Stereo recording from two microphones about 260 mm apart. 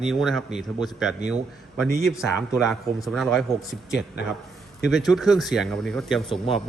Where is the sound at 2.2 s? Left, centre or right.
Centre.